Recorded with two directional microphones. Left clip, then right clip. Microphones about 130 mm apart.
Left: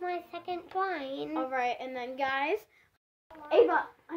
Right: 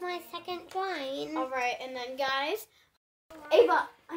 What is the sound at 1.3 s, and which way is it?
Speech, 35° left (ahead or behind).